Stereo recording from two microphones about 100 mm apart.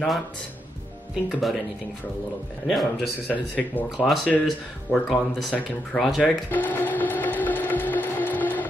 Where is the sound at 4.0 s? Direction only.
5° right (ahead or behind).